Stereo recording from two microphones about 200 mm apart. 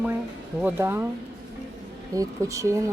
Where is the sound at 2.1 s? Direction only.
15° right (ahead or behind).